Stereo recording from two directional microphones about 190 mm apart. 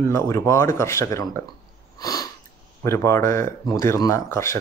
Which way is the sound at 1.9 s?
20° left (ahead or behind).